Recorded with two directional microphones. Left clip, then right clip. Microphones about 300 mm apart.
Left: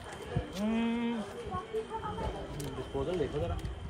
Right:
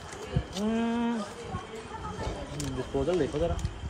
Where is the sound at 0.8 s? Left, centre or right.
Centre.